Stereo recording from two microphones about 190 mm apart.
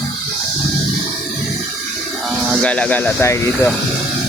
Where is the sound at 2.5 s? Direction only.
5° left (ahead or behind).